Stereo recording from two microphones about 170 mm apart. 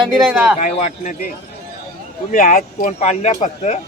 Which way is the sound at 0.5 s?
40° left (ahead or behind).